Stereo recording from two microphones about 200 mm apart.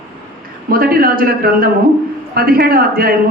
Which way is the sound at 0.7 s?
45° right (ahead or behind).